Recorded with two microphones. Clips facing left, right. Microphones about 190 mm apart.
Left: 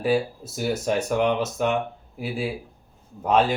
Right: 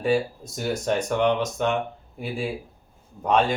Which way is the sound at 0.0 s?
5° left (ahead or behind).